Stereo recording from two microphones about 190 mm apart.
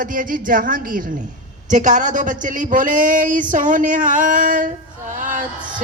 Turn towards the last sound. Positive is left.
turn(degrees=-45)  # may be behind; listen again after turning